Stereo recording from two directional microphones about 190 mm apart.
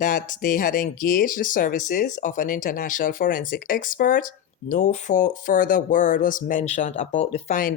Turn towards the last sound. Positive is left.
turn(degrees=40)  # may be behind; listen again after turning